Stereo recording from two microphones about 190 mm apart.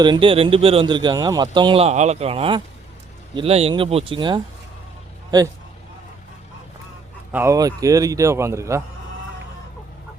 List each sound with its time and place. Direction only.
0.0 s speech: 25° right (ahead or behind)
7.3 s a man's voice: 15° right (ahead or behind)